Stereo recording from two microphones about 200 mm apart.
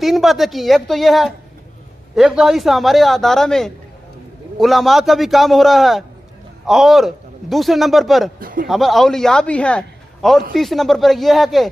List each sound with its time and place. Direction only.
0.0 s a man's voice: centre (ahead or behind)
8.4 s speech: 45° right (ahead or behind)
8.6 s a man's voice: centre (ahead or behind)